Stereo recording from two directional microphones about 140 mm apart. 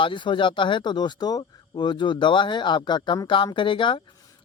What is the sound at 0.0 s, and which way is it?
Speech, 35° left (ahead or behind).